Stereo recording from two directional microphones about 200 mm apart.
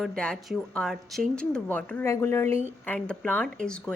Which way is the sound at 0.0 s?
5° left (ahead or behind).